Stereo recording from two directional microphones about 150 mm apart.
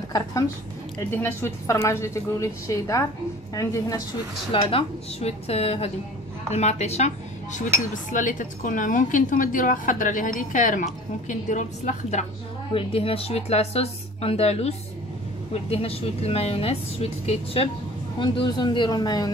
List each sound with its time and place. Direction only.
0.1 s a woman's voice: 25° left (ahead or behind)
4.5 s a woman's voice: 35° left (ahead or behind)
8.1 s a woman's voice: 60° left (ahead or behind)
12.7 s a woman's voice: 40° left (ahead or behind)
18.2 s a woman's voice: 30° left (ahead or behind)